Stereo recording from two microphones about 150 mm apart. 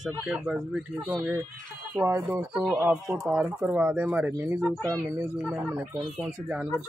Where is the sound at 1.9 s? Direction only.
15° right (ahead or behind).